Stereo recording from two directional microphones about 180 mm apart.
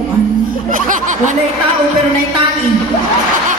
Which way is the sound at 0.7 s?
45° right (ahead or behind).